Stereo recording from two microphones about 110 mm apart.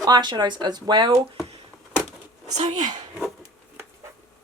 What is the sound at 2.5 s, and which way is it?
Speech, 90° right.